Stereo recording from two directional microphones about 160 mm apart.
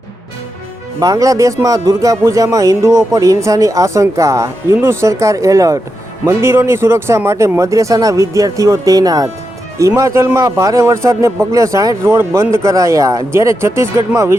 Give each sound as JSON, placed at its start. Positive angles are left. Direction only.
{"t": 0.9, "sound": "speech", "side_deg": -20}